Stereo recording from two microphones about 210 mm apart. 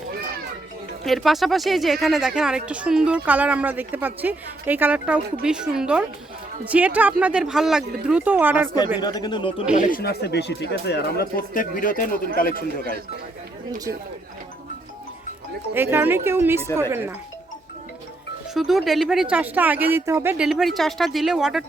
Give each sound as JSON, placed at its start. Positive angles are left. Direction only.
{"t": 1.0, "sound": "speech", "side_deg": 0}
{"t": 9.0, "sound": "speech", "side_deg": 20}
{"t": 9.7, "sound": "speech", "side_deg": 40}
{"t": 13.7, "sound": "speech", "side_deg": -20}
{"t": 15.7, "sound": "speech", "side_deg": -10}
{"t": 18.5, "sound": "speech", "side_deg": 0}